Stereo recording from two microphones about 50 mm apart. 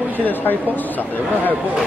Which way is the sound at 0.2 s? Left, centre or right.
Left.